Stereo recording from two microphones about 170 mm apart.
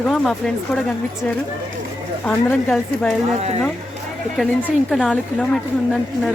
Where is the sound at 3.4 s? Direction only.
40° right (ahead or behind).